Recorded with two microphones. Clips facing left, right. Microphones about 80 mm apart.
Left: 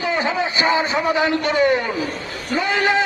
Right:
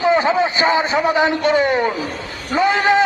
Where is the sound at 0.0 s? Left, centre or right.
Right.